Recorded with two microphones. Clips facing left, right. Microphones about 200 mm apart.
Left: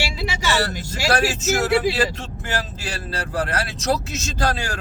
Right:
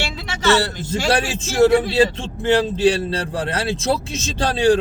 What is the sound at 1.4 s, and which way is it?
Speech, 30° right (ahead or behind).